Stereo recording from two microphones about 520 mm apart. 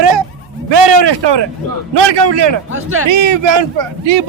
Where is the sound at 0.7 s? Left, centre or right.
Right.